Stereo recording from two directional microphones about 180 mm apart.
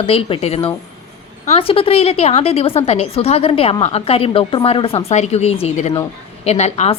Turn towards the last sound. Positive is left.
turn(degrees=40)  # may be behind; listen again after turning